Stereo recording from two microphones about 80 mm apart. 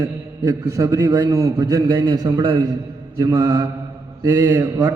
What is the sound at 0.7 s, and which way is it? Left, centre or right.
Speech, right.